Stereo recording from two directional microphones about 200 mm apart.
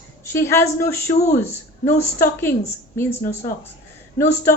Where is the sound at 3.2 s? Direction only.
30° left (ahead or behind).